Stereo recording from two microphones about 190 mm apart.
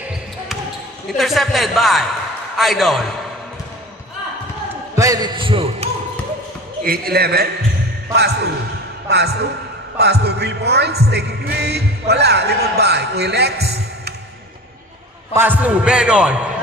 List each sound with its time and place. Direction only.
1.1 s a man's voice: centre (ahead or behind)
4.9 s a sound: 20° right (ahead or behind)
6.8 s a man's voice: 50° right (ahead or behind)
15.3 s a man's voice: 10° right (ahead or behind)